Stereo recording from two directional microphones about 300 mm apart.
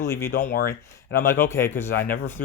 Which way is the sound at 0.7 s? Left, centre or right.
Centre.